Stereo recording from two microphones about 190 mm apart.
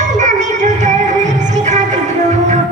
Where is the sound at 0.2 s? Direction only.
40° right (ahead or behind).